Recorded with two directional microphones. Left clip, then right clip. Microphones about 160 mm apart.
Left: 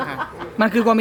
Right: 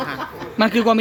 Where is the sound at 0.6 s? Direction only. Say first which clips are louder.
Even; 10° right (ahead or behind).